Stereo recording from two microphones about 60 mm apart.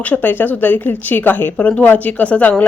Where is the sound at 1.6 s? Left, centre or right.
Left.